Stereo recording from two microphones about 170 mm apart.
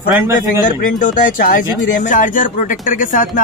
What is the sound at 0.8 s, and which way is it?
Speech, 50° left (ahead or behind).